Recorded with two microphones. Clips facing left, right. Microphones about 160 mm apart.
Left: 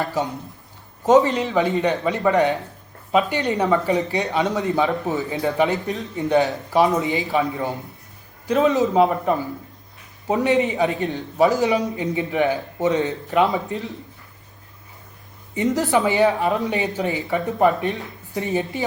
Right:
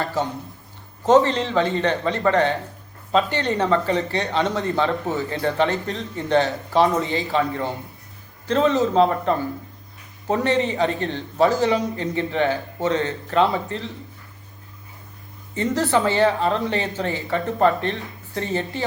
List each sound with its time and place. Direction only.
0.0 s speech: 15° left (ahead or behind)
15.5 s speech: 15° left (ahead or behind)